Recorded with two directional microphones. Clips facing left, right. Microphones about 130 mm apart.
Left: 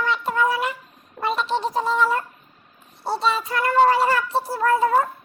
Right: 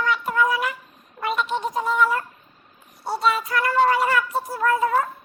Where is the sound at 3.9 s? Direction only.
30° left (ahead or behind).